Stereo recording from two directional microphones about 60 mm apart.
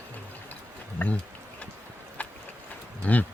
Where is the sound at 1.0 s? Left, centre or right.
Left.